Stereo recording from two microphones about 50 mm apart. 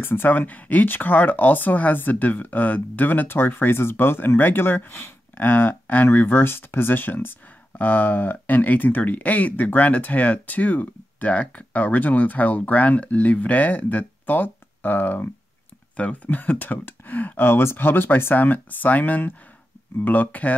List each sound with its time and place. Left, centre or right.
0.0 s speech: left
16.0 s speech: left
16.3 s speech: left